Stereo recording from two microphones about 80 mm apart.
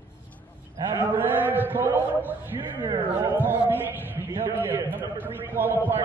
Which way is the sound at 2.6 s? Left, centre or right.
Right.